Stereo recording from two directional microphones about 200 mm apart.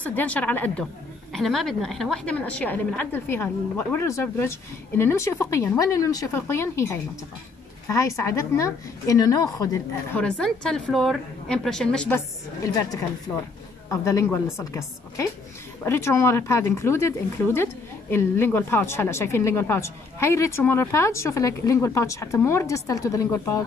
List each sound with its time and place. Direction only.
0.0 s a woman's voice: 10° left (ahead or behind)
10.1 s a woman's voice: 5° left (ahead or behind)
12.6 s a woman's voice: 15° left (ahead or behind)